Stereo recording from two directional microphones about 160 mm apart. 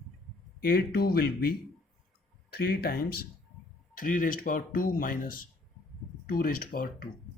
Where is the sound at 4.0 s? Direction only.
60° left (ahead or behind).